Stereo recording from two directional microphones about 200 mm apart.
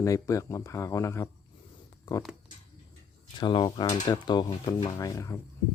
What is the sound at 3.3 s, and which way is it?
Speech, 25° left (ahead or behind).